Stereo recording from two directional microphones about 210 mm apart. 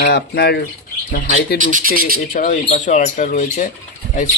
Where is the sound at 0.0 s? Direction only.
50° left (ahead or behind).